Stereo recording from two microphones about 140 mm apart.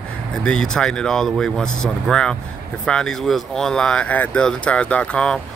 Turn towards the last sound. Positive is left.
turn(degrees=10)  # may be behind; listen again after turning